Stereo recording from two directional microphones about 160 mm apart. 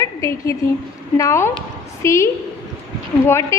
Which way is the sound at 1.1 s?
20° left (ahead or behind).